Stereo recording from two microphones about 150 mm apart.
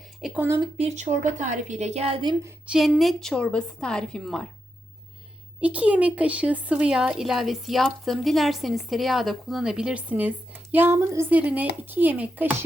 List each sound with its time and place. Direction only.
0.3 s speech: 15° right (ahead or behind)
0.8 s a woman's voice: 50° right (ahead or behind)
2.6 s a woman's voice: 5° right (ahead or behind)
5.5 s speech: 10° right (ahead or behind)